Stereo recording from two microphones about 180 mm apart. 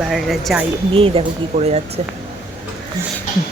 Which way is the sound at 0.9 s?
30° right (ahead or behind).